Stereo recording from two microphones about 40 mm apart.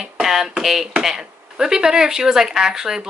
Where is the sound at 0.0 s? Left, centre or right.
Centre.